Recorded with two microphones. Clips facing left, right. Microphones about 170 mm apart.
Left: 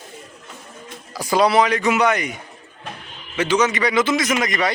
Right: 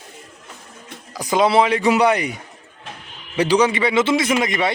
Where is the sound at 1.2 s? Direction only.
20° right (ahead or behind).